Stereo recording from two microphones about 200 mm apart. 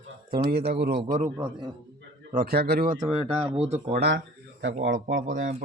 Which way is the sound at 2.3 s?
50° right (ahead or behind).